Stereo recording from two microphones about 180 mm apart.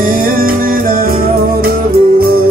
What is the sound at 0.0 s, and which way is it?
Music, 55° right (ahead or behind).